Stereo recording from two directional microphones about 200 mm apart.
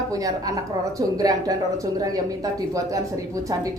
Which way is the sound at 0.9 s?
20° right (ahead or behind).